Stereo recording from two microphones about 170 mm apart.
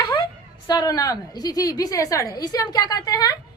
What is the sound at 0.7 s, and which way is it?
A woman's voice, 20° left (ahead or behind).